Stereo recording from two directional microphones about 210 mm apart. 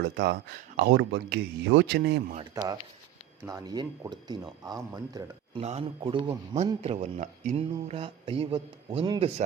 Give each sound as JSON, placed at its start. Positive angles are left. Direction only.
{"t": 0.0, "sound": "speech", "side_deg": -50}
{"t": 2.3, "sound": "a man's voice", "side_deg": -20}